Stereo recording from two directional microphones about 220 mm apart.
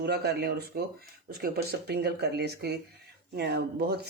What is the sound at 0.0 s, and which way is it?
Speech, 50° right (ahead or behind).